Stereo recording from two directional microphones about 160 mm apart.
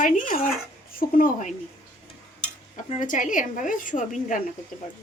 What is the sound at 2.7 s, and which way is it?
A woman's voice, 55° left (ahead or behind).